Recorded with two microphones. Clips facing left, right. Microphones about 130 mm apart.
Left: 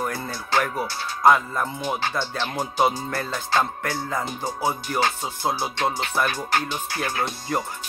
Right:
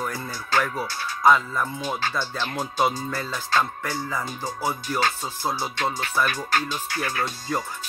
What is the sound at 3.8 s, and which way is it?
Music, 60° left (ahead or behind).